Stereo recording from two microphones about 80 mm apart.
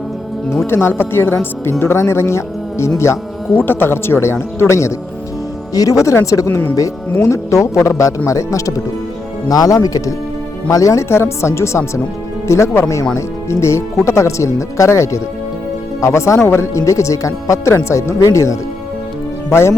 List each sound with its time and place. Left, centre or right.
0.7 s speech: left